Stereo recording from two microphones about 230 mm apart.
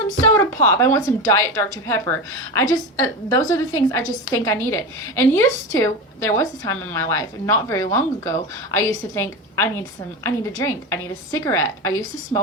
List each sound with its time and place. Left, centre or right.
0.3 s a woman's voice: centre
3.3 s a woman's voice: centre